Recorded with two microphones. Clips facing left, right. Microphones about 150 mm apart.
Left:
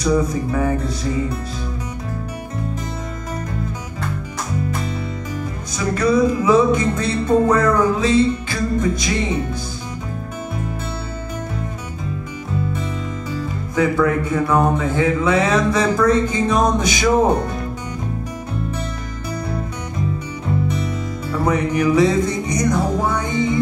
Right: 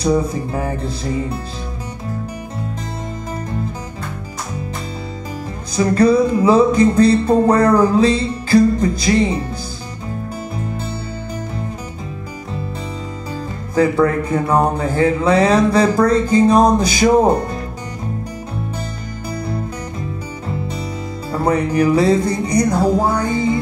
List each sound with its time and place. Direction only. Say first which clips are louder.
0.0 s music: right 1 dB; 30° right (ahead or behind)
5.8 s music: right 4 dB; 30° right (ahead or behind)
13.7 s music: right 3 dB; 35° right (ahead or behind)
21.3 s music: right 2 dB; 30° right (ahead or behind)